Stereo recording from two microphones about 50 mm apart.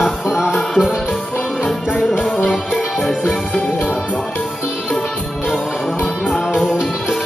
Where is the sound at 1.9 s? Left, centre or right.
Centre.